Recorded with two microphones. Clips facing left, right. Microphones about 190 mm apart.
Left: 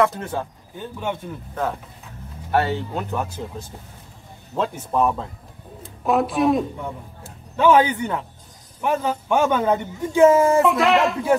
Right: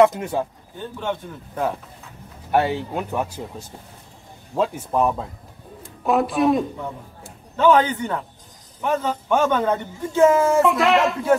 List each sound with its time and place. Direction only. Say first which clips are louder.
0.0 s speech: right 4 dB; 15° right (ahead or behind)
0.7 s a man's voice: right 1 dB; 10° left (ahead or behind)
2.5 s speech: right 1 dB; 15° right (ahead or behind)
4.6 s speech: right 1 dB; 5° right (ahead or behind)
7.5 s a man's voice: even; 10° left (ahead or behind)
10.6 s speech: even; centre (ahead or behind)